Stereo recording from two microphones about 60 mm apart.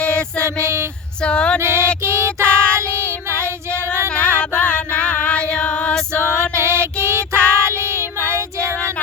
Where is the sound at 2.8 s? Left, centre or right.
Right.